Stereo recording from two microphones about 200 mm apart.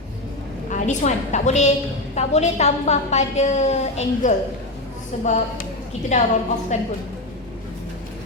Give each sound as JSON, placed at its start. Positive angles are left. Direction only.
{"t": 0.7, "sound": "a woman's voice", "side_deg": 40}